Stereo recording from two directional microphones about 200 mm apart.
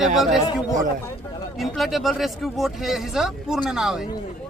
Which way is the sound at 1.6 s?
Centre (ahead or behind).